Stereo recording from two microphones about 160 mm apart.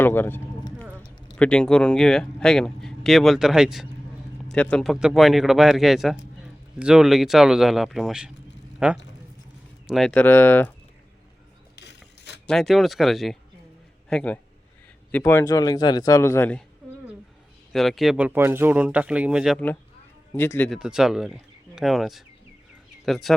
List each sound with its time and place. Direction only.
0.0 s a man's voice: 15° left (ahead or behind)
12.5 s a man's voice: centre (ahead or behind)
17.7 s speech: centre (ahead or behind)
20.3 s a man's voice: 15° left (ahead or behind)
20.7 s speech: 5° right (ahead or behind)